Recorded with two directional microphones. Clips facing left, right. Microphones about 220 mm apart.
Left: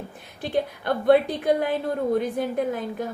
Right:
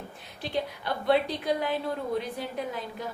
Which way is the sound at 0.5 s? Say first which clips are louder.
Left 7 dB; 50° left (ahead or behind).